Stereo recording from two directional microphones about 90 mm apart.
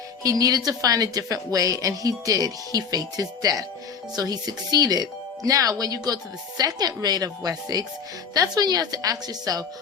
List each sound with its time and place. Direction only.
0.2 s a woman's voice: 40° right (ahead or behind)